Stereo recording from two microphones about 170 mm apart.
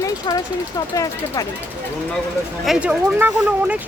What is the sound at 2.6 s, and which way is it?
Speech, 5° right (ahead or behind).